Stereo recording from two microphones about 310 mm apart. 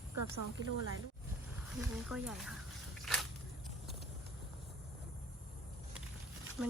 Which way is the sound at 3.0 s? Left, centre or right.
Centre.